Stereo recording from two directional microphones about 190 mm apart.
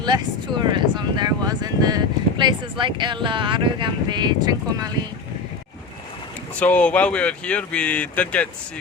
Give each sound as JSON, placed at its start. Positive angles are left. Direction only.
{"t": 0.0, "sound": "a sound", "side_deg": -20}
{"t": 2.4, "sound": "speech", "side_deg": -25}
{"t": 6.6, "sound": "speech", "side_deg": 5}